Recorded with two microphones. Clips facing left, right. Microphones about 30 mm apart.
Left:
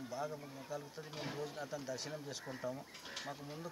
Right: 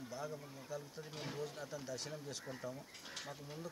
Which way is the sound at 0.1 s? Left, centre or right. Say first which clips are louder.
Left 3 dB; centre.